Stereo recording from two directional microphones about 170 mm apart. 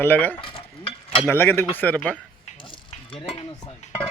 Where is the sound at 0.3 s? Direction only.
30° left (ahead or behind).